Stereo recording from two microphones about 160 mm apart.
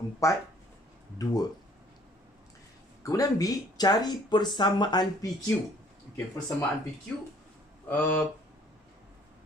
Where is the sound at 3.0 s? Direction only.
20° left (ahead or behind).